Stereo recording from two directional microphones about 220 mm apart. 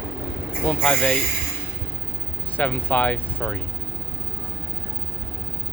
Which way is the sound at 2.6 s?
5° left (ahead or behind).